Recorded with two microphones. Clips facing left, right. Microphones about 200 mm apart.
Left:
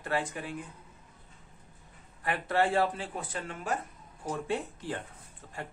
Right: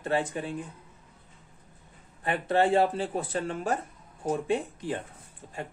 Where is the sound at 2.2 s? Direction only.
25° right (ahead or behind).